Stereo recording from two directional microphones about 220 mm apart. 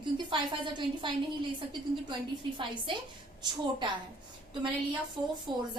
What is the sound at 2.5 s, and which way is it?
A woman's voice, 20° right (ahead or behind).